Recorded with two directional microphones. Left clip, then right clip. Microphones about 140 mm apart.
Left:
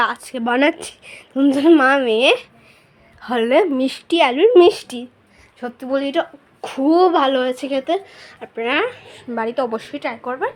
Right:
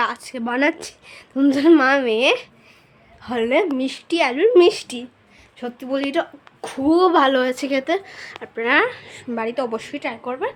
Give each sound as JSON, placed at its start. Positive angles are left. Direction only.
{"t": 0.0, "sound": "speech", "side_deg": 15}
{"t": 1.4, "sound": "a woman's voice", "side_deg": 5}
{"t": 5.5, "sound": "a woman's voice", "side_deg": 10}
{"t": 7.1, "sound": "a woman's voice", "side_deg": -10}
{"t": 9.3, "sound": "a woman's voice", "side_deg": 10}